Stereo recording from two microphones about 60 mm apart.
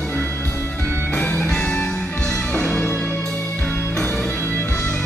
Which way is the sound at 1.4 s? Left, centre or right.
Centre.